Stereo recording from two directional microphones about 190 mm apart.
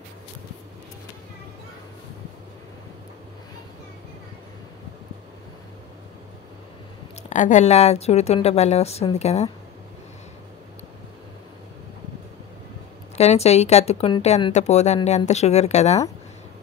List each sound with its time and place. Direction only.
7.2 s speech: 40° left (ahead or behind)
13.2 s speech: 35° left (ahead or behind)